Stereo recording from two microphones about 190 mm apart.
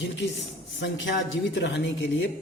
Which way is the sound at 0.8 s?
70° left (ahead or behind).